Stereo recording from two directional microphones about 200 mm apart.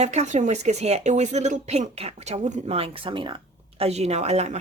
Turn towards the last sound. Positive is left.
turn(degrees=-35)  # may be behind; listen again after turning